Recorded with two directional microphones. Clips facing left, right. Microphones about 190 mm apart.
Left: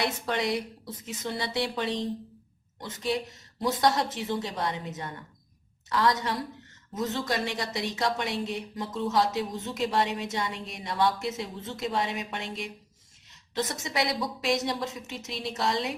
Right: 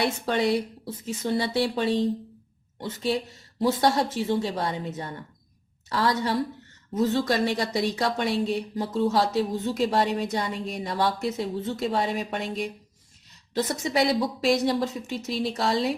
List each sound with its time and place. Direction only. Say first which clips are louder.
0.0 s a woman's voice: right 4 dB; 30° right (ahead or behind)